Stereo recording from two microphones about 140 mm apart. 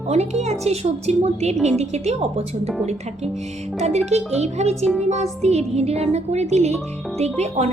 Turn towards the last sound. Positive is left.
turn(degrees=-50)  # may be behind; listen again after turning